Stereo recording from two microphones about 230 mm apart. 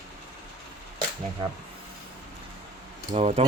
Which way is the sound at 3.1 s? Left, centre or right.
Right.